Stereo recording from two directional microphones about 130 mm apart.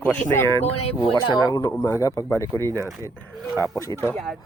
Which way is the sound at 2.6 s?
30° right (ahead or behind).